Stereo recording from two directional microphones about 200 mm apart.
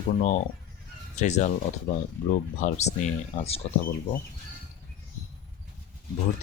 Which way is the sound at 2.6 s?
35° left (ahead or behind).